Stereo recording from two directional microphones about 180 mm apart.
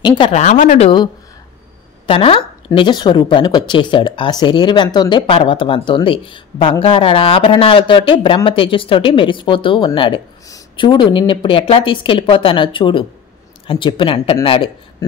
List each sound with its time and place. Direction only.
0.0 s a woman's voice: 30° left (ahead or behind)
0.4 s speech: 45° left (ahead or behind)
0.8 s a woman's voice: 25° left (ahead or behind)